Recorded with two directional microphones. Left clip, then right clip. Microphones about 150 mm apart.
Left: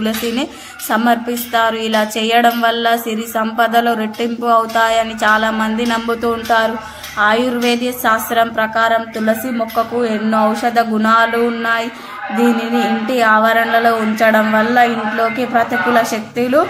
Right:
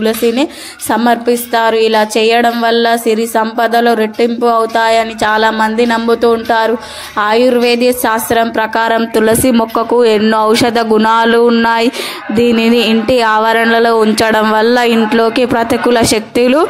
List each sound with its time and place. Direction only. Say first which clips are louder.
0.0 s a woman's voice: right 7 dB; 35° right (ahead or behind); by 16.6 s 65° right (ahead or behind)